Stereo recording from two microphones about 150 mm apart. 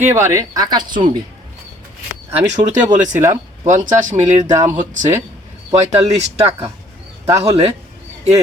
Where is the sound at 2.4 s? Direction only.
50° right (ahead or behind).